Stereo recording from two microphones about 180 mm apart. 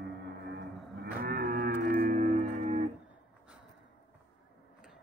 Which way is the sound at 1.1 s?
55° right (ahead or behind).